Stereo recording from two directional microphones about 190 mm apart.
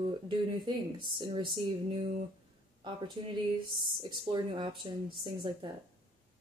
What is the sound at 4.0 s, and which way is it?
Speech, 25° right (ahead or behind).